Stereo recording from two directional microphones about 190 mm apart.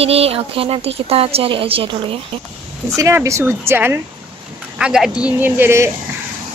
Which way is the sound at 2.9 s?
15° right (ahead or behind).